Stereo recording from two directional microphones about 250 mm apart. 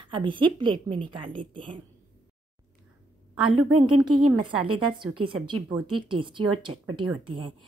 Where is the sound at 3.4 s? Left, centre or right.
Right.